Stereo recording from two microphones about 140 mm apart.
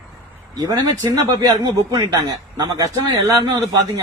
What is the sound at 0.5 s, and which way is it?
A man's voice, 25° right (ahead or behind).